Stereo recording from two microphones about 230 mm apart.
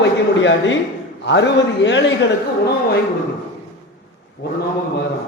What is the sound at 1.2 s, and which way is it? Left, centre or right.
Speech, left.